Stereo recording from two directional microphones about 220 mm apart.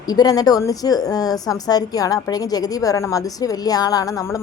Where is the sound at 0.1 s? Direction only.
15° left (ahead or behind).